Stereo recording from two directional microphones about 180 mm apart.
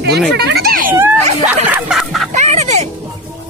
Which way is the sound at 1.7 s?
5° right (ahead or behind).